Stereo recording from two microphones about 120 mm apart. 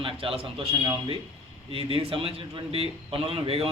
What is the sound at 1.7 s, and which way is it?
A man's voice, 50° right (ahead or behind).